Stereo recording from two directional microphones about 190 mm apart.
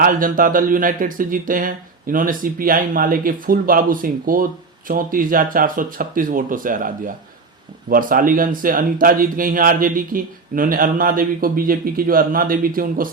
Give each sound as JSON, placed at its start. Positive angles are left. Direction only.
{"t": 0.0, "sound": "speech", "side_deg": -45}